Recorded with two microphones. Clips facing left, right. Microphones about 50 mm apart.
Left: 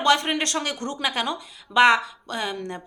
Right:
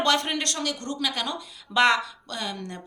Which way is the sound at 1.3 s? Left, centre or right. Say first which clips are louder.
Left 3 dB; centre.